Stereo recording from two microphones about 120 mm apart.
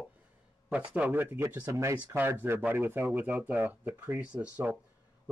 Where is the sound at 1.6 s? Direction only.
30° right (ahead or behind); by 4.8 s 15° right (ahead or behind).